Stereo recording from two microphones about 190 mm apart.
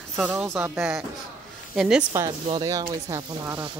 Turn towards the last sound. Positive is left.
turn(degrees=-20)  # may be behind; listen again after turning